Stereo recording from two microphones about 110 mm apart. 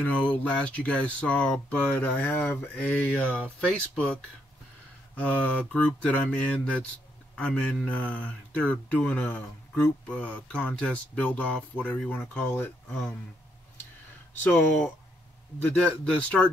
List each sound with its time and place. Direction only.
0.0 s speech: 10° left (ahead or behind)
14.4 s speech: 15° left (ahead or behind)